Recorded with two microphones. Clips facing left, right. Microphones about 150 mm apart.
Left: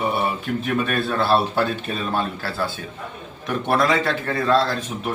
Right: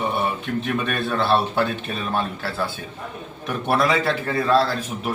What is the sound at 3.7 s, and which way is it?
Speech, centre (ahead or behind).